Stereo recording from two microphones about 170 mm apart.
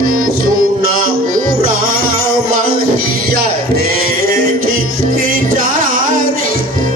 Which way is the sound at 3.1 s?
65° right (ahead or behind).